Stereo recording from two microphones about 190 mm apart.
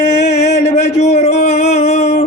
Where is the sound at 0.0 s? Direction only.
35° left (ahead or behind).